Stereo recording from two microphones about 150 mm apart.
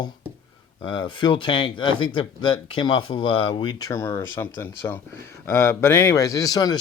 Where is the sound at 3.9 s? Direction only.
20° left (ahead or behind).